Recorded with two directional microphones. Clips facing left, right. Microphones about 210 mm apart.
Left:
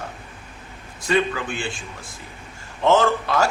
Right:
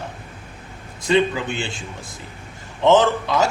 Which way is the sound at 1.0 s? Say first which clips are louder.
Right 3 dB; 20° right (ahead or behind).